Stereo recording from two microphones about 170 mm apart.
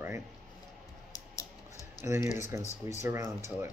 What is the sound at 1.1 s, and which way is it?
Typing, 20° left (ahead or behind).